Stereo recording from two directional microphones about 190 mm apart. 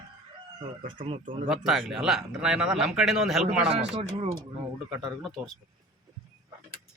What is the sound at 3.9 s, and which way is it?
Speech, 30° right (ahead or behind).